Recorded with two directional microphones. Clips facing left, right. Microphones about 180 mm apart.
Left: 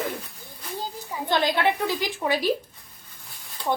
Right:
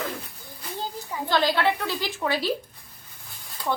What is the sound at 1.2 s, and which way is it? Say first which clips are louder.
A woman's voice: even; 20° left (ahead or behind).